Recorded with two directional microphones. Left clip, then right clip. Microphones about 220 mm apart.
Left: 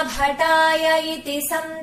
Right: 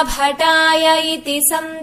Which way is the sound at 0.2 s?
35° right (ahead or behind).